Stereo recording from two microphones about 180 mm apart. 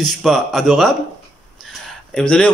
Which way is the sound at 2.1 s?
5° left (ahead or behind).